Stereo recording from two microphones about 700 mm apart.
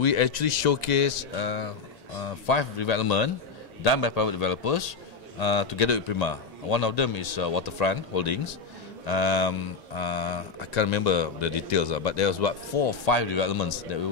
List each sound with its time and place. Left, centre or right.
0.0 s a man's voice: left